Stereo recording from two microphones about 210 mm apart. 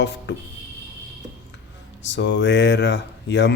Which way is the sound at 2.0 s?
55° left (ahead or behind).